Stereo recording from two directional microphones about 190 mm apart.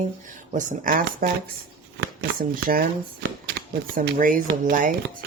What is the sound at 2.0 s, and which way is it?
Speech, 60° right (ahead or behind).